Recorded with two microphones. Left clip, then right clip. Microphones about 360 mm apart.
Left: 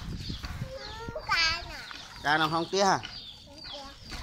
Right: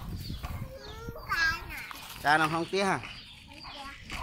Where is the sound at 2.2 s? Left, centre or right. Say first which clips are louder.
Right 1 dB; centre.